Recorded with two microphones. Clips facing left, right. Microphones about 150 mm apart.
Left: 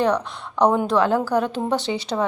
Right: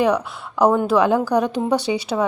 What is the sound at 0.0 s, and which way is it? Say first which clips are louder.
A woman's voice: right 2 dB; 10° right (ahead or behind).